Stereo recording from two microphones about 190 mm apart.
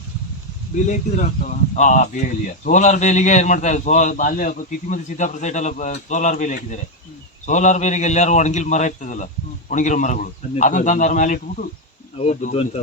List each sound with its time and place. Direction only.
0.9 s speech: 40° left (ahead or behind)